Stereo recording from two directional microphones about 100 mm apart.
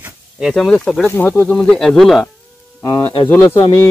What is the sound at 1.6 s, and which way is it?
Speech, 5° left (ahead or behind).